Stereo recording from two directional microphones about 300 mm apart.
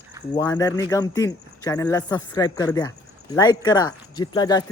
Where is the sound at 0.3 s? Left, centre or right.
Centre.